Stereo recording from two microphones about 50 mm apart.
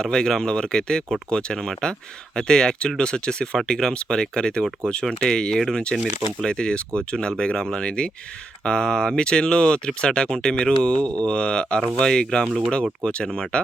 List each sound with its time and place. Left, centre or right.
0.0 s speech: centre